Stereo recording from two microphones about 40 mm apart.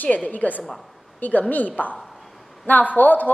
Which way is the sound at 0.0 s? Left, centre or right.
Left.